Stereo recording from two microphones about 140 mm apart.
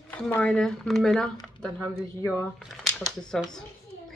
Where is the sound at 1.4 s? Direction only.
5° left (ahead or behind).